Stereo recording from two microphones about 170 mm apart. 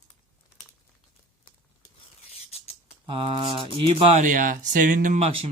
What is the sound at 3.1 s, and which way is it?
Speech, 30° right (ahead or behind).